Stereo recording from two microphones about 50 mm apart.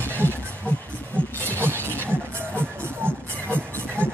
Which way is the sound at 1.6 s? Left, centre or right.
Right.